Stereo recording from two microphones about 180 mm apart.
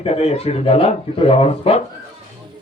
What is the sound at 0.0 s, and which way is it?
A man's voice, 35° left (ahead or behind).